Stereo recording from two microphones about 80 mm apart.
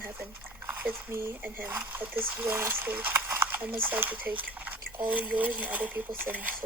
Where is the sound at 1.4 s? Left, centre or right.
Centre.